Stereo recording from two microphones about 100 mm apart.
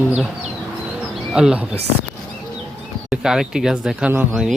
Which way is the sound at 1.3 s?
10° right (ahead or behind).